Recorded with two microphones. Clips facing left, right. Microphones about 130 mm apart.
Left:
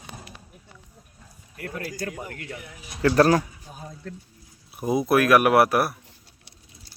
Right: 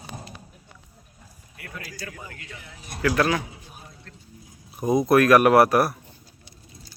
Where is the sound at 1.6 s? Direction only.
45° left (ahead or behind).